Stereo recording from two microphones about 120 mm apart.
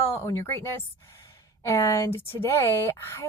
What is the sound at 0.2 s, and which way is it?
Speech, 20° left (ahead or behind).